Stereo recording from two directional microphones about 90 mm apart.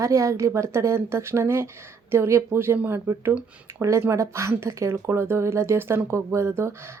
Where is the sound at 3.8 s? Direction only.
35° right (ahead or behind).